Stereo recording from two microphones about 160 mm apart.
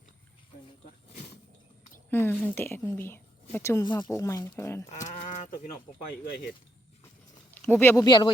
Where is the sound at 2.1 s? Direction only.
15° left (ahead or behind).